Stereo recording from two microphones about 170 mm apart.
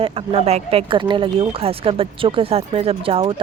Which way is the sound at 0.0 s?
35° right (ahead or behind).